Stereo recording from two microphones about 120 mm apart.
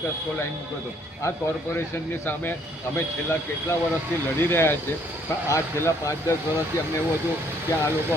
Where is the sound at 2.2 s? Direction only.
15° left (ahead or behind).